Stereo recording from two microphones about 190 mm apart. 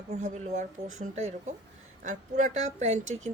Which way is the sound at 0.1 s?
35° right (ahead or behind).